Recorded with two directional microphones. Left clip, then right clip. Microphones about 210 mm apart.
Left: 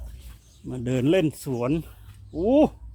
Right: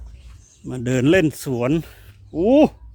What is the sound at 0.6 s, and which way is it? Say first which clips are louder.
Speech: right 5 dB; 30° right (ahead or behind).